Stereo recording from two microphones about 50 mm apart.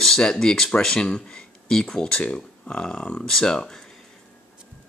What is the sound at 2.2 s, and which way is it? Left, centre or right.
Speech, left.